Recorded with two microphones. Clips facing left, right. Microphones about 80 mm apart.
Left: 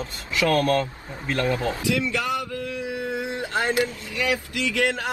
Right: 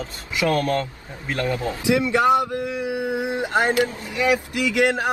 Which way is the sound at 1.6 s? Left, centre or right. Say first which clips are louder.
Right 3 dB; right.